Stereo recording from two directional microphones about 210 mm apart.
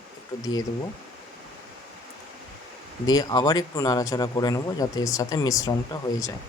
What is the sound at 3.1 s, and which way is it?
Speech, 15° left (ahead or behind).